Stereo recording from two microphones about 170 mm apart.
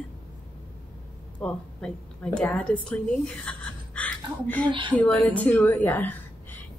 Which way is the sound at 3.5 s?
10° left (ahead or behind).